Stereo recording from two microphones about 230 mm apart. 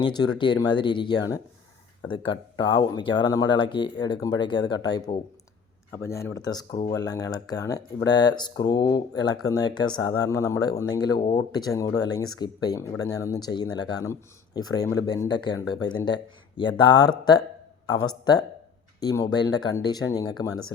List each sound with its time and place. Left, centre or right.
0.0 s speech: centre